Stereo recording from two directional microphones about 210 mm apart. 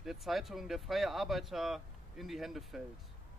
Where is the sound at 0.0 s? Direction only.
Centre (ahead or behind).